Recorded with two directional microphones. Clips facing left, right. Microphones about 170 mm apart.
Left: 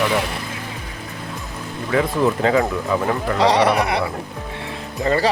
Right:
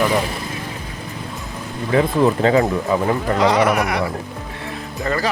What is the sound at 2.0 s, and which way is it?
Speech, 35° right (ahead or behind).